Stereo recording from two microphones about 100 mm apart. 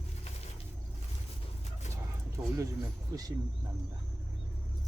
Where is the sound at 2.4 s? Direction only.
35° right (ahead or behind).